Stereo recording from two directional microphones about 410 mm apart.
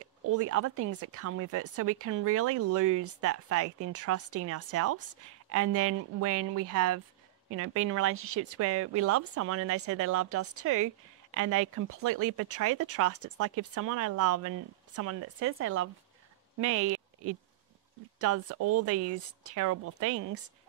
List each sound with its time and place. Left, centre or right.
0.4 s speech: right